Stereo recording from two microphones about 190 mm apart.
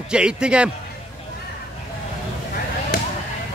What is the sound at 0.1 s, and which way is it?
Speech, 5° right (ahead or behind).